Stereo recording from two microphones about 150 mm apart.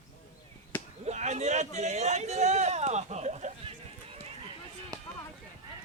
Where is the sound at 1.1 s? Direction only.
50° right (ahead or behind).